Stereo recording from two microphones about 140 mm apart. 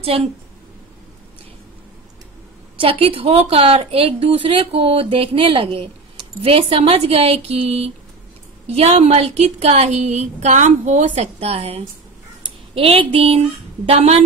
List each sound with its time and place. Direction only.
0.0 s a woman's voice: 45° right (ahead or behind)
2.8 s a woman's voice: 40° right (ahead or behind)